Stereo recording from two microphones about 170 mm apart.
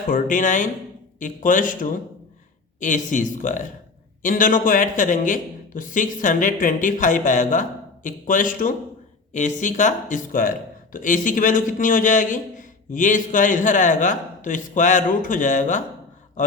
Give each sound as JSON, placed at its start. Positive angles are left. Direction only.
{"t": 0.1, "sound": "a man's voice", "side_deg": 50}